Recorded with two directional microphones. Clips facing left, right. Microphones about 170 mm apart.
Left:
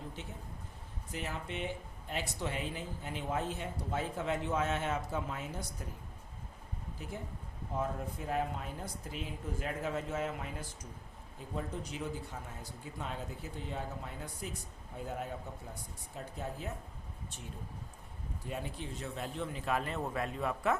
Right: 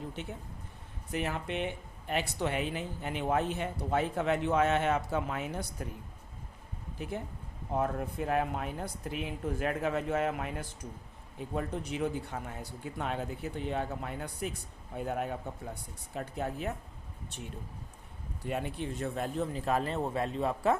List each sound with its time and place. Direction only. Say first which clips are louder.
1.1 s speech: right 6 dB; 65° right (ahead or behind)
7.0 s speech: right 7 dB; 60° right (ahead or behind)
11.5 s speech: right 5 dB; 65° right (ahead or behind)
18.4 s a man's voice: right 6 dB; 65° right (ahead or behind); by 20.7 s 30° right (ahead or behind)